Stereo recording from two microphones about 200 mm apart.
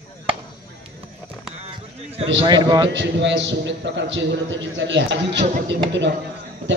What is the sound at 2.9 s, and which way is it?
A man's voice, 65° right (ahead or behind).